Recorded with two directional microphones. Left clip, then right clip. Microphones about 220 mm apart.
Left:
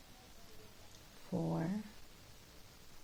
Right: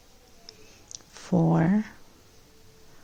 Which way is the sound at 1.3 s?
50° right (ahead or behind).